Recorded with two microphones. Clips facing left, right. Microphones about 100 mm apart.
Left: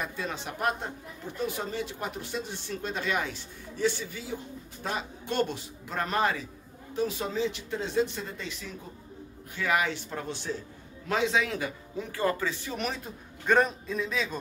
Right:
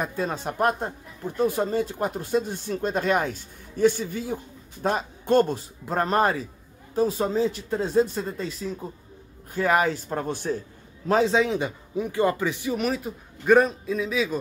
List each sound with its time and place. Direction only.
0.0 s speech: 45° right (ahead or behind)
11.1 s a man's voice: 35° right (ahead or behind); by 12.7 s 15° right (ahead or behind)
12.7 s a man's voice: 5° right (ahead or behind)